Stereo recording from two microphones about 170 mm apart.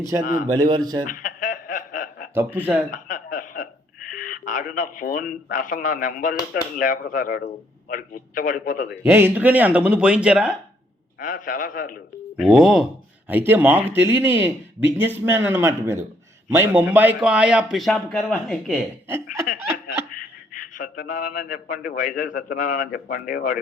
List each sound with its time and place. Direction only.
0.0 s speech: 20° right (ahead or behind)
1.0 s chuckle: 50° left (ahead or behind)
2.3 s speech: 10° right (ahead or behind)
2.9 s a sound: 50° left (ahead or behind)
4.1 s a man's voice: 50° left (ahead or behind)
8.9 s speech: 15° right (ahead or behind)
11.2 s a man's voice: 50° left (ahead or behind)
12.4 s a man's voice: 5° right (ahead or behind)
19.0 s speech: 15° right (ahead or behind)
20.1 s a sound: 50° left (ahead or behind)
21.8 s a man's voice: 55° left (ahead or behind)